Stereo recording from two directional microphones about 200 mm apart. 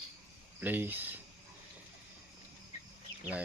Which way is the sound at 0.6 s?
10° right (ahead or behind).